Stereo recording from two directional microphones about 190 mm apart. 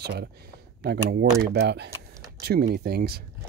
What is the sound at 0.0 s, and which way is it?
Speech, 60° right (ahead or behind).